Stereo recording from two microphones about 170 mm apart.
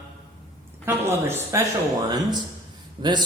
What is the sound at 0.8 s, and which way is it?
Speech, 15° right (ahead or behind).